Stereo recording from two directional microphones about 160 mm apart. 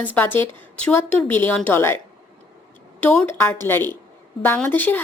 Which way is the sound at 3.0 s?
15° left (ahead or behind).